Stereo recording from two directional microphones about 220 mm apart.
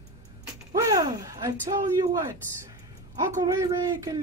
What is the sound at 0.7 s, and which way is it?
A woman's voice, 15° right (ahead or behind).